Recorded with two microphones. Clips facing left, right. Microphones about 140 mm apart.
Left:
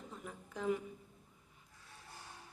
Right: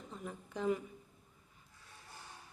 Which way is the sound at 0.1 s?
Centre (ahead or behind).